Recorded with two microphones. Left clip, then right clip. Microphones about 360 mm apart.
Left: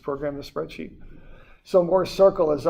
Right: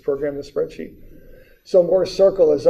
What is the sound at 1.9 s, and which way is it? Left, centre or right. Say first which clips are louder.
Speech: right 3 dB; left.